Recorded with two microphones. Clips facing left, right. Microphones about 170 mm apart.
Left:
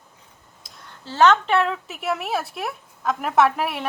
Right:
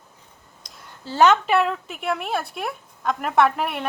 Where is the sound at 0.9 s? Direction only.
10° right (ahead or behind).